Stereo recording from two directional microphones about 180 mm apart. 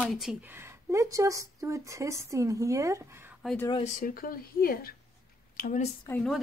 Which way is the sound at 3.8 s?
50° left (ahead or behind).